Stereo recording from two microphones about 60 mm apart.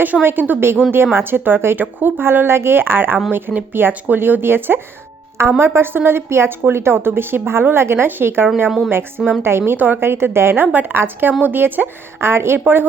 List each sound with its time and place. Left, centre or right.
0.0 s a woman's voice: right
9.7 s a woman's voice: right
10.0 s a woman's voice: right